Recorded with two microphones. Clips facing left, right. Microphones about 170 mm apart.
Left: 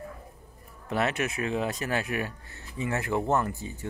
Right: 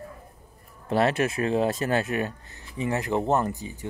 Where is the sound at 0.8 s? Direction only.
30° right (ahead or behind).